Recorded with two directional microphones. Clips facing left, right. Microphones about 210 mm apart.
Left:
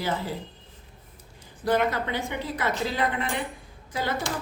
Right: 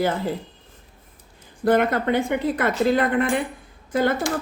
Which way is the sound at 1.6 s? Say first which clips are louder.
Right 5 dB; 50° right (ahead or behind).